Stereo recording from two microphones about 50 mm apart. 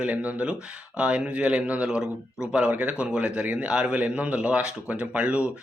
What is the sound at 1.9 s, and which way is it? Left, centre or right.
Speech, centre.